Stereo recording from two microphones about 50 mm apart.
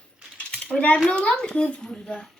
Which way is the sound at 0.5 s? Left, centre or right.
Left.